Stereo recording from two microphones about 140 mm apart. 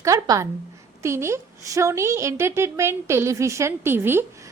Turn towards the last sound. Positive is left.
turn(degrees=-15)  # may be behind; listen again after turning